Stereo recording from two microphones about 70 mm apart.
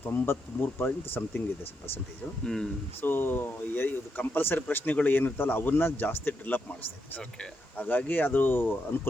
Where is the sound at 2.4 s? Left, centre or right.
Centre.